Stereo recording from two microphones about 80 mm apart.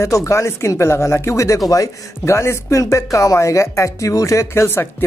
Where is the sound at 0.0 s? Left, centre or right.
Left.